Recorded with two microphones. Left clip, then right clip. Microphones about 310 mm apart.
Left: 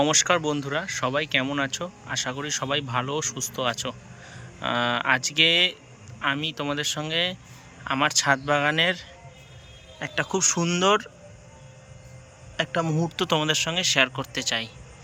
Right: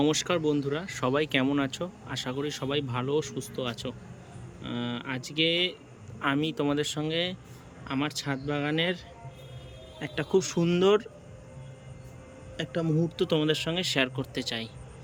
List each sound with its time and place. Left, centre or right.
0.0 s speech: centre
12.5 s speech: centre